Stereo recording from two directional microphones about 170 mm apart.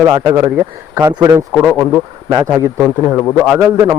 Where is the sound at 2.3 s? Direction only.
25° right (ahead or behind).